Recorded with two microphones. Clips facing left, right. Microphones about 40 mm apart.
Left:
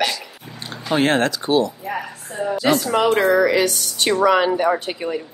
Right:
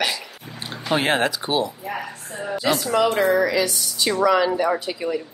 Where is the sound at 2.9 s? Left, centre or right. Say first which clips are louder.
Left 1 dB; left.